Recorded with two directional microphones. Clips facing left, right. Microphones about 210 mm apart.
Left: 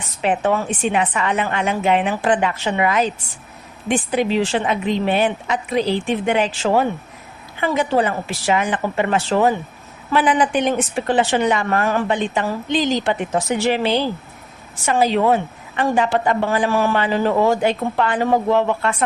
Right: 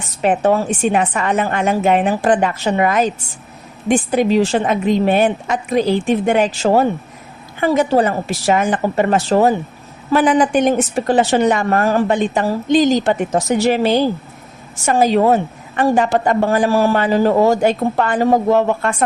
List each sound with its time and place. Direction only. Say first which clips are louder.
0.2 s a woman's voice: right 4 dB; 45° right (ahead or behind)